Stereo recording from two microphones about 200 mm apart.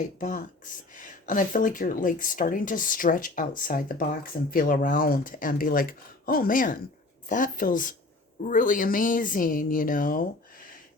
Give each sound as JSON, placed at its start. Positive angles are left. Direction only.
{"t": 0.0, "sound": "speech", "side_deg": 40}